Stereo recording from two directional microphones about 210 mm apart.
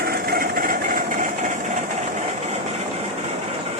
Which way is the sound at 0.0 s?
45° right (ahead or behind).